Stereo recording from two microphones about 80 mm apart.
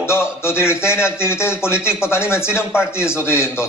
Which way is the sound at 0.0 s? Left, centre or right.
Left.